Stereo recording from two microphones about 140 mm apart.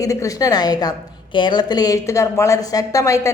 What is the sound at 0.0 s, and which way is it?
A woman's voice, 25° left (ahead or behind).